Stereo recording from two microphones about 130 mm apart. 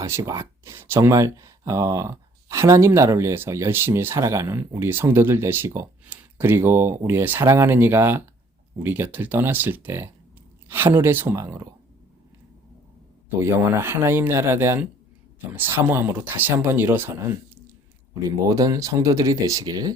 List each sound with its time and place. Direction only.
0.0 s speech: 20° right (ahead or behind)
13.4 s speech: 20° right (ahead or behind)